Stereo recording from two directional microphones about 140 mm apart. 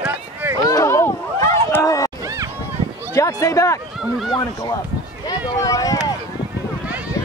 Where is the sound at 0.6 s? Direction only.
25° left (ahead or behind).